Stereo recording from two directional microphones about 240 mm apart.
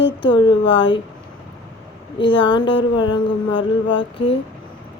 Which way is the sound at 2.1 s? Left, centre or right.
Left.